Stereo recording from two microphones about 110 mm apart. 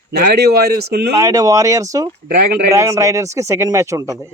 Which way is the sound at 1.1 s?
30° right (ahead or behind).